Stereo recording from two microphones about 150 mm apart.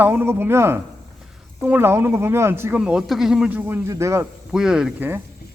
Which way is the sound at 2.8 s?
5° right (ahead or behind).